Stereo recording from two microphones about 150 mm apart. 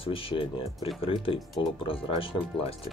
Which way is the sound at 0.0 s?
35° left (ahead or behind).